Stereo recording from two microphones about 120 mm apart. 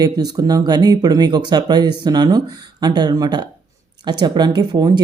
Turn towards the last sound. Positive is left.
turn(degrees=-40)  # may be behind; listen again after turning